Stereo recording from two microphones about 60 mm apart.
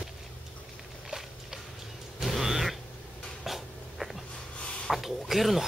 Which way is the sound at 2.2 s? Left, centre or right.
Centre.